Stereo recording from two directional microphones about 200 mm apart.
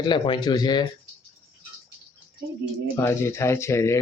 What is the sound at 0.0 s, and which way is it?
Speech, 20° left (ahead or behind).